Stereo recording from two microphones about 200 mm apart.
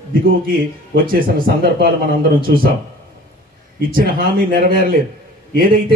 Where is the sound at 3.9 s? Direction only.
45° right (ahead or behind).